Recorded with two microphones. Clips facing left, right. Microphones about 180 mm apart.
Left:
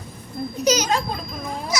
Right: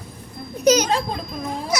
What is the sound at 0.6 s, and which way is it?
Speech, 55° right (ahead or behind).